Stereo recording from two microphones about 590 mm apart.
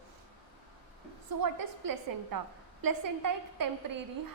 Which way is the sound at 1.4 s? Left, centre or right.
Right.